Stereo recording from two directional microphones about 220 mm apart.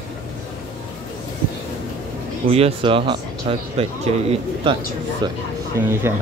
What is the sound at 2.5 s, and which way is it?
Speech, 25° right (ahead or behind).